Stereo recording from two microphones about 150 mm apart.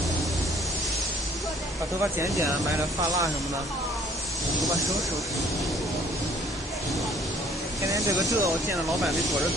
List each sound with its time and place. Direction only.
2.1 s speech: 20° right (ahead or behind)
4.6 s speech: centre (ahead or behind)
7.8 s speech: 20° right (ahead or behind)
9.0 s speech: centre (ahead or behind)